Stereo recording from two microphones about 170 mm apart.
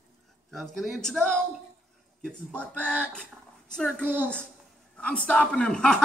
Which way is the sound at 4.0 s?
10° right (ahead or behind).